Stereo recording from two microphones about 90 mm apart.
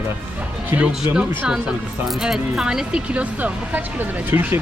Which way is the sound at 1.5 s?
5° right (ahead or behind).